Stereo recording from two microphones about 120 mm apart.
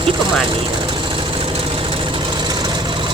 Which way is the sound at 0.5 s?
45° right (ahead or behind).